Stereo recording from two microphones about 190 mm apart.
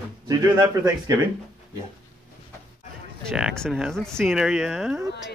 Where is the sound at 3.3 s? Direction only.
Centre (ahead or behind).